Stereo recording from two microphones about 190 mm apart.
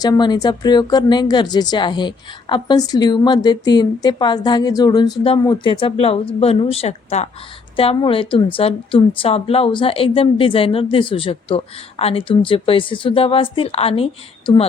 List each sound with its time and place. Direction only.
0.0 s speech: 20° left (ahead or behind)